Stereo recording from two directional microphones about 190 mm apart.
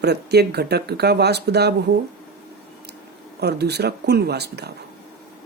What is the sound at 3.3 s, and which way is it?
Speech, 60° right (ahead or behind).